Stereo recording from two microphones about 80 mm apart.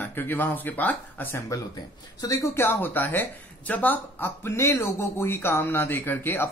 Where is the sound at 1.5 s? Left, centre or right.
Left.